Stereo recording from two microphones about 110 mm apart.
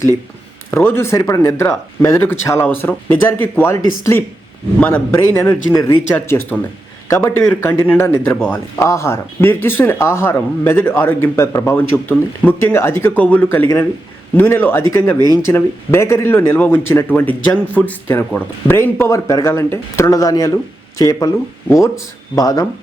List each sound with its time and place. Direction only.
0.8 s speech: 20° left (ahead or behind)
4.8 s speech: 15° left (ahead or behind); by 22.6 s 35° left (ahead or behind)